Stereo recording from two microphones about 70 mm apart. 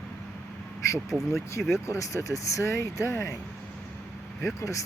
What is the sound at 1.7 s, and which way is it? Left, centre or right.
Speech, left.